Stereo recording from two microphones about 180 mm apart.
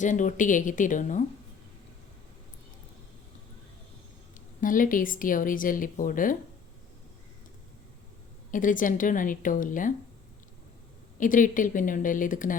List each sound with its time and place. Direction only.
0.0 s speech: 45° left (ahead or behind)
4.6 s speech: 50° left (ahead or behind)
8.4 s speech: 45° left (ahead or behind)
11.2 s speech: 45° left (ahead or behind)